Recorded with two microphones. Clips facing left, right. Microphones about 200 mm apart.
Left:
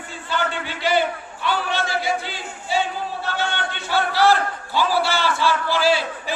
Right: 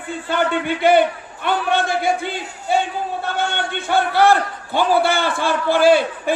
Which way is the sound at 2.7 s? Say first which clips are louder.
Right 4 dB; 55° right (ahead or behind).